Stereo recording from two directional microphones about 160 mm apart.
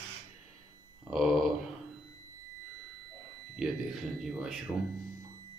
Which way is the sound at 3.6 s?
5° right (ahead or behind).